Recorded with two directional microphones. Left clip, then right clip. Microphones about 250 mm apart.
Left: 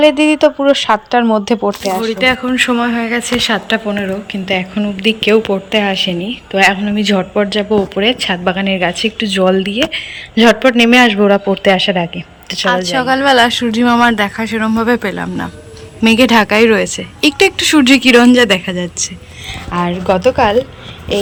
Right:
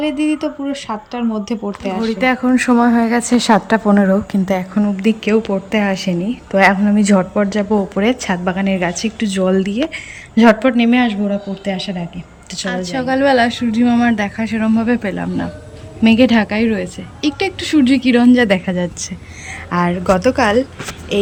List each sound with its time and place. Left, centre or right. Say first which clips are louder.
0.0 s speech: left 9 dB; centre
2.0 s a woman's voice: even; centre
4.8 s a woman's voice: left 3 dB; centre